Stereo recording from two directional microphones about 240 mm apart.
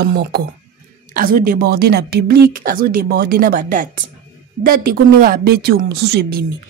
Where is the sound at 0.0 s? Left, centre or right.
Right.